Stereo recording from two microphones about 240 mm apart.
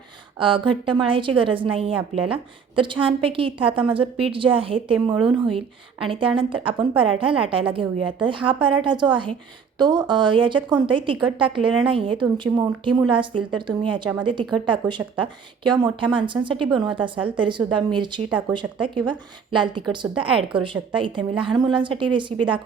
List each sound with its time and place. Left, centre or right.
0.3 s a woman's voice: right